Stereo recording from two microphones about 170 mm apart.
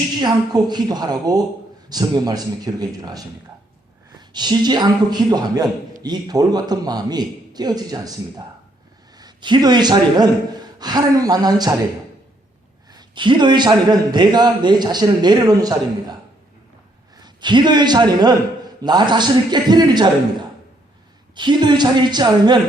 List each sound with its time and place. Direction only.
0.2 s a man's voice: 25° right (ahead or behind)
12.9 s a man's voice: 25° right (ahead or behind)
17.2 s a man's voice: 25° right (ahead or behind)
21.3 s a man's voice: 25° right (ahead or behind)